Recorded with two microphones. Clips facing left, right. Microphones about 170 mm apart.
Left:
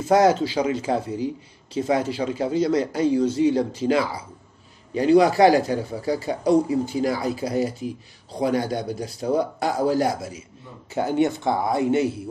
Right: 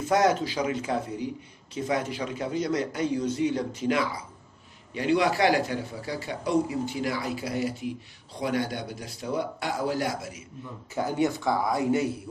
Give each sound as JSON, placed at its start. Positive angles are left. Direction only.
{"t": 0.1, "sound": "speech", "side_deg": 30}
{"t": 10.9, "sound": "speech", "side_deg": 25}